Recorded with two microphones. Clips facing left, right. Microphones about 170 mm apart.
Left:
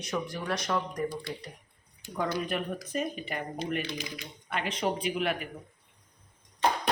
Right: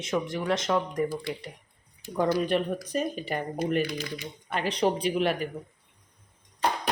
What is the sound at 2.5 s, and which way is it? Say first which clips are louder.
Speech: right 5 dB; 30° right (ahead or behind).